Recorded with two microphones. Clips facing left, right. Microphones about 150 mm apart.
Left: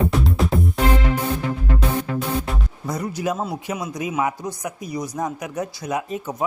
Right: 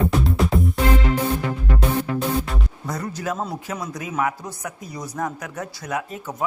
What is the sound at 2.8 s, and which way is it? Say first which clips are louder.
Speech: left 4 dB; 10° left (ahead or behind).